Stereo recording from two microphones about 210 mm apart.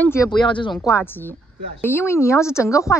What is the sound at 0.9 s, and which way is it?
A woman's voice, 10° left (ahead or behind).